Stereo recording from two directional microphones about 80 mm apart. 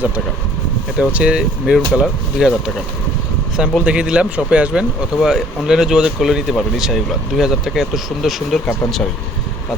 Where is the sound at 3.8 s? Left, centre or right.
Centre.